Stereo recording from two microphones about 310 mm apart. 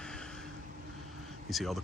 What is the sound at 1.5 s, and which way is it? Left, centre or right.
Speech, centre.